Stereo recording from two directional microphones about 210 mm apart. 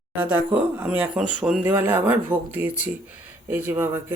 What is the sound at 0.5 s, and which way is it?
Speech, 5° right (ahead or behind).